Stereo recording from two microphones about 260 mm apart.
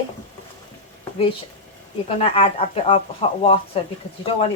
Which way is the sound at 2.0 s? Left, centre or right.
Left.